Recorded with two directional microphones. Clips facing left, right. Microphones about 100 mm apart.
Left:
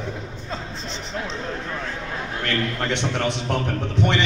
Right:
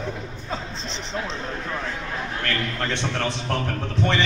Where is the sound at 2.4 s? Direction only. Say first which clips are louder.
Left 4 dB; 20° left (ahead or behind).